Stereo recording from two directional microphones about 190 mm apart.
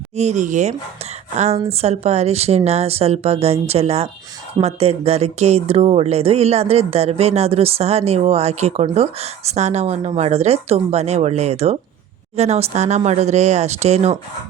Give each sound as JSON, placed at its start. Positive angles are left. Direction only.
{"t": 0.2, "sound": "speech", "side_deg": -35}